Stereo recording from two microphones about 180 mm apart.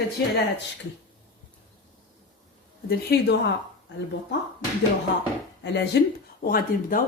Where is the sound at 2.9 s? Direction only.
65° left (ahead or behind).